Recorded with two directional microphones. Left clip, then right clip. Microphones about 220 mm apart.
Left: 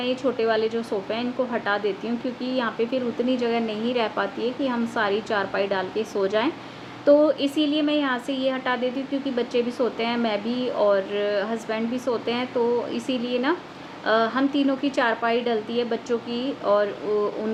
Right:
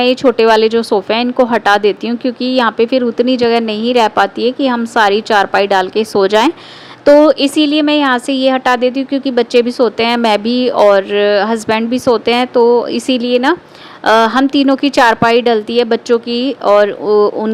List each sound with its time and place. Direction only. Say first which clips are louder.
0.0 s a woman's voice: right 14 dB; 45° right (ahead or behind)